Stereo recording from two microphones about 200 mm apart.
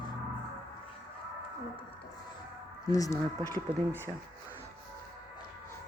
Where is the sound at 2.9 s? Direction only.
15° left (ahead or behind).